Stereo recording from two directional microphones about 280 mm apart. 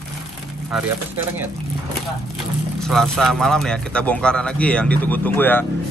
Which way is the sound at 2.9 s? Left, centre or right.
Centre.